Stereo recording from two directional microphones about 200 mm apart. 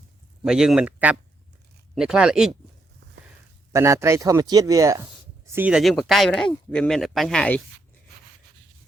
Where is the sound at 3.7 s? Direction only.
15° right (ahead or behind); by 7.6 s 5° left (ahead or behind).